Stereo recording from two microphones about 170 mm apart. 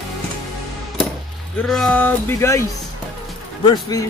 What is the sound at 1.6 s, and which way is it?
Speech, centre (ahead or behind).